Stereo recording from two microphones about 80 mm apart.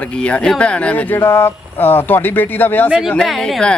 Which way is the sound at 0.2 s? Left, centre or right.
Centre.